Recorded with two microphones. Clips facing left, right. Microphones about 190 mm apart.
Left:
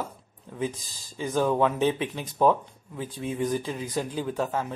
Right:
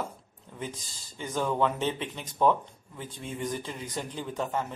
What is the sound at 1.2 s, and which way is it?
Speech, 10° left (ahead or behind).